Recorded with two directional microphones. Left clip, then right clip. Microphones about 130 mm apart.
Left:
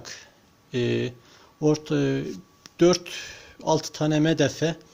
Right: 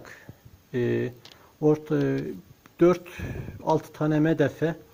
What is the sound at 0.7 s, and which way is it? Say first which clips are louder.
Speech: left 1 dB; 30° left (ahead or behind).